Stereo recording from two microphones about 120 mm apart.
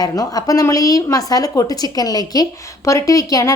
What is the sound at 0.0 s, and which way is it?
A woman's voice, 30° left (ahead or behind).